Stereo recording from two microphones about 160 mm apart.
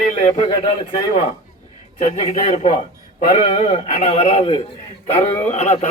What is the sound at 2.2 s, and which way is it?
A man's voice, 40° left (ahead or behind).